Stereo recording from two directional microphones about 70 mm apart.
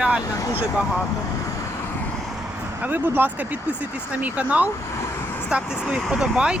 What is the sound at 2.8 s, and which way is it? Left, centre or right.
Speech, right.